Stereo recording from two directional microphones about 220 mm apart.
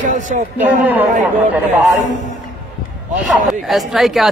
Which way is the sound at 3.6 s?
Centre (ahead or behind).